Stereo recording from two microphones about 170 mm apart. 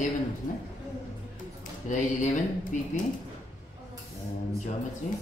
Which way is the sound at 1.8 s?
45° left (ahead or behind).